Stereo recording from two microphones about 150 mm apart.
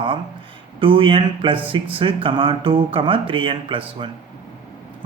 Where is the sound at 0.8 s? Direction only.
35° right (ahead or behind).